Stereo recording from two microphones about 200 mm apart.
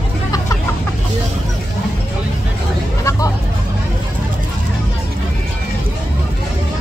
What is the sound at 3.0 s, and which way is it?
Hubbub, 15° left (ahead or behind).